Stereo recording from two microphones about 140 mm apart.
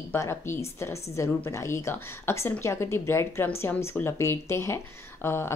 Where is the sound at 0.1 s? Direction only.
20° left (ahead or behind).